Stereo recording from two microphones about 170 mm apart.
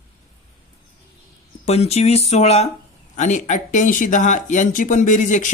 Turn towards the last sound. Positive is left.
turn(degrees=45)  # may be behind; listen again after turning